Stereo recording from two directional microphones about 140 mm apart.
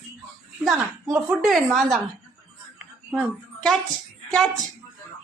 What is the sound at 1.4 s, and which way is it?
Speech, centre (ahead or behind).